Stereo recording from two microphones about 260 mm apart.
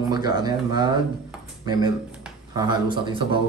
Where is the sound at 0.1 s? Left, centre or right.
Centre.